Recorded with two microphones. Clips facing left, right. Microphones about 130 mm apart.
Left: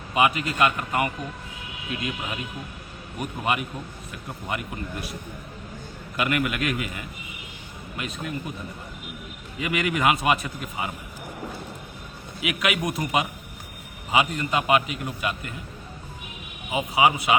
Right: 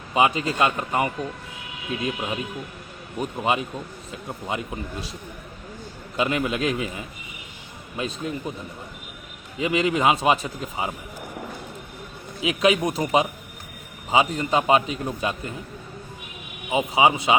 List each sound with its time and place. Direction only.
0.1 s a man's voice: 25° right (ahead or behind)
3.2 s a man's voice: 25° right (ahead or behind)
6.1 s a man's voice: 25° right (ahead or behind)
9.6 s a man's voice: 25° right (ahead or behind)
12.4 s a man's voice: 25° right (ahead or behind)
16.7 s a man's voice: 25° right (ahead or behind)